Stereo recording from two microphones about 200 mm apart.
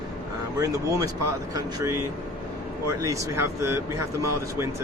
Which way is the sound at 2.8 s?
15° right (ahead or behind).